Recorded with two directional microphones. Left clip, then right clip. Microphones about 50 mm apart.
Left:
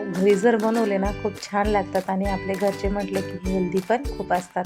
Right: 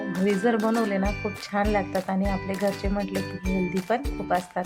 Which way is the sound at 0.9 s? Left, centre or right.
Left.